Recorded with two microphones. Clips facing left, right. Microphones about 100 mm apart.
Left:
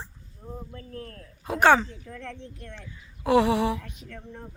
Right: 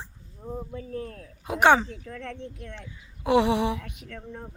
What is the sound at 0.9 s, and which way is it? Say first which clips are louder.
Speech: right 5 dB; 5° right (ahead or behind).